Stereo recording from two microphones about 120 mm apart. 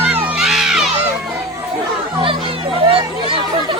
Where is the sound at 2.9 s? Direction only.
50° right (ahead or behind).